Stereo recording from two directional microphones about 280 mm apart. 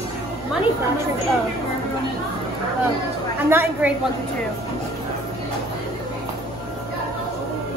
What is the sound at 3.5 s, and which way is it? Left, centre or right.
Speech, centre.